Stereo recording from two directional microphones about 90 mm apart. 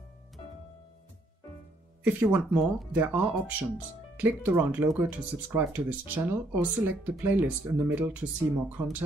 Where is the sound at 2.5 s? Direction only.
15° right (ahead or behind).